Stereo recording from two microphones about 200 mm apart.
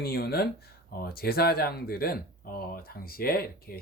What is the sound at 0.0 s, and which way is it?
Speech, 50° left (ahead or behind).